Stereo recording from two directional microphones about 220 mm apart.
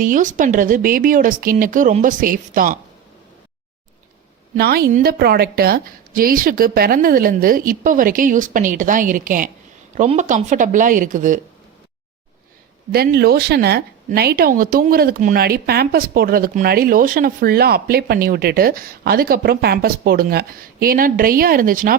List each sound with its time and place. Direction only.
0.0 s a woman's voice: 35° right (ahead or behind)
4.5 s a woman's voice: 45° right (ahead or behind)
12.9 s speech: 45° right (ahead or behind)